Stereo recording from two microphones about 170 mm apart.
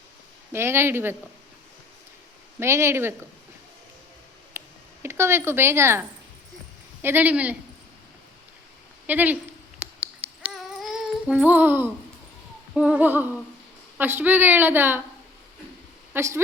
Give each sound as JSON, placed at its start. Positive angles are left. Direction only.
{"t": 0.5, "sound": "a woman's voice", "side_deg": -15}
{"t": 2.6, "sound": "a woman's voice", "side_deg": -15}
{"t": 4.6, "sound": "a sound", "side_deg": -15}
{"t": 5.0, "sound": "a woman's voice", "side_deg": -15}
{"t": 9.0, "sound": "a woman's voice", "side_deg": -10}
{"t": 10.4, "sound": "a sound", "side_deg": -5}
{"t": 12.7, "sound": "a woman's voice", "side_deg": -5}
{"t": 16.1, "sound": "a woman's voice", "side_deg": -15}